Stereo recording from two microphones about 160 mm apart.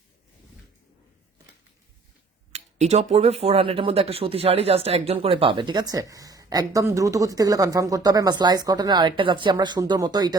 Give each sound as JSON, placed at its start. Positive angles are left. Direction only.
{"t": 2.5, "sound": "speech", "side_deg": -45}